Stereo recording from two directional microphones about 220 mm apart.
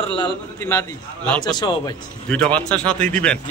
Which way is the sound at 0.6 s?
10° left (ahead or behind).